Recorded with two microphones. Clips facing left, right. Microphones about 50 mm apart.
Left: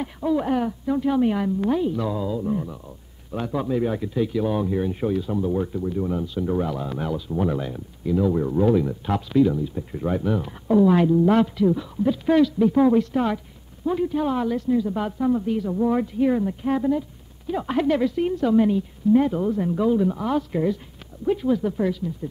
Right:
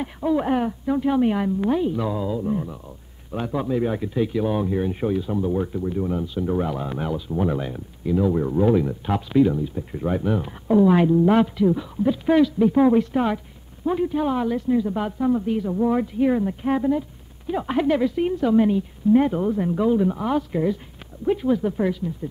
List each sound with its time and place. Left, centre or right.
0.0 s a man's voice: centre
3.9 s speech: centre
6.6 s speech: right
9.8 s speech: centre
14.7 s speech: right
15.0 s speech: centre
19.1 s speech: right